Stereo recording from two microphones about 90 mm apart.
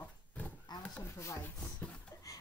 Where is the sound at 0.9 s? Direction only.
30° left (ahead or behind).